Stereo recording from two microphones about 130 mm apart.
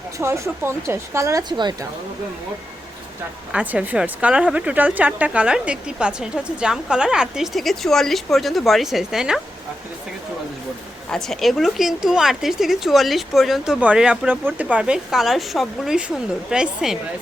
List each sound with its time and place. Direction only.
0.2 s speech: 20° right (ahead or behind)
3.5 s speech: 10° right (ahead or behind)
11.1 s a woman's voice: 5° left (ahead or behind)